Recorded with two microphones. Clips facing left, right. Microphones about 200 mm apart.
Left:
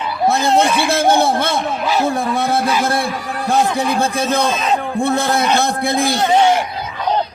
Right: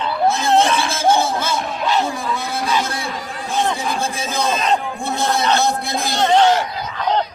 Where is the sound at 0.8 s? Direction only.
60° left (ahead or behind).